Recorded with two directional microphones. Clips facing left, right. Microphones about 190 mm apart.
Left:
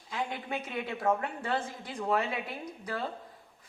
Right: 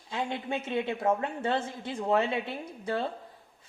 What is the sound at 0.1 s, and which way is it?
Speech, 25° right (ahead or behind).